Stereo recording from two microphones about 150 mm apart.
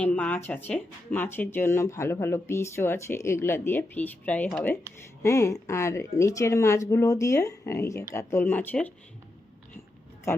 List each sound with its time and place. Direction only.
0.0 s speech: 10° left (ahead or behind)
5.2 s speech: 20° left (ahead or behind)
10.3 s speech: 20° left (ahead or behind)